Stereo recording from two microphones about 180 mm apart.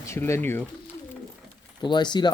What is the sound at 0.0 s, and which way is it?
Speech, 15° left (ahead or behind).